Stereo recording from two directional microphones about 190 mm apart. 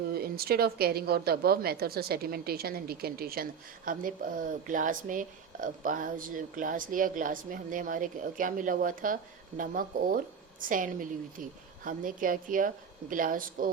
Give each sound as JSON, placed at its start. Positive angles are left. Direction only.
{"t": 0.1, "sound": "speech", "side_deg": -55}